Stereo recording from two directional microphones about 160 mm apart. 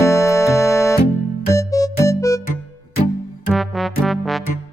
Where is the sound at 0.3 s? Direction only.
Centre (ahead or behind).